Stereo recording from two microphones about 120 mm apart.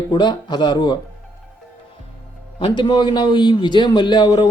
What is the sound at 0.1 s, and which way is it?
Speech, 40° left (ahead or behind).